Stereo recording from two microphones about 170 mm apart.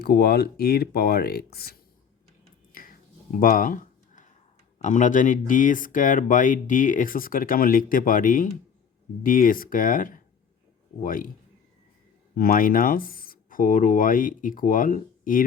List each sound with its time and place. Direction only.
0.0 s speech: 70° left (ahead or behind)
2.7 s finger snapping: 55° left (ahead or behind)
3.4 s a sound: 55° left (ahead or behind)
4.8 s speech: 50° left (ahead or behind)
12.3 s speech: 55° left (ahead or behind)